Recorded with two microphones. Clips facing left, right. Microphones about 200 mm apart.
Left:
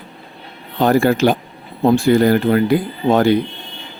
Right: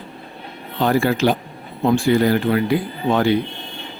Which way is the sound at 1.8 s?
30° left (ahead or behind).